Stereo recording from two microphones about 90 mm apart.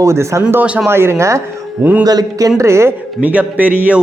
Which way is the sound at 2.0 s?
45° right (ahead or behind).